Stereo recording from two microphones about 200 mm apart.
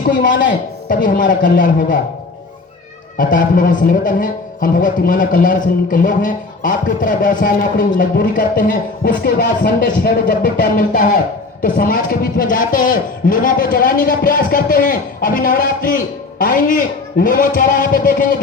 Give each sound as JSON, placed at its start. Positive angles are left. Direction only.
{"t": 0.9, "sound": "speech", "side_deg": 40}
{"t": 3.2, "sound": "speech", "side_deg": 40}